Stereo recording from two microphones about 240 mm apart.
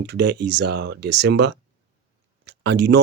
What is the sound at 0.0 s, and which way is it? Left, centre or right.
Speech, right.